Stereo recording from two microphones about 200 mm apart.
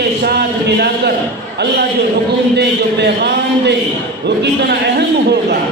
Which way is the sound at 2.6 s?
55° right (ahead or behind).